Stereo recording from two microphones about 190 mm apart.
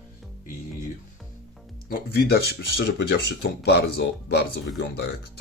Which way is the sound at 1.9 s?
55° left (ahead or behind).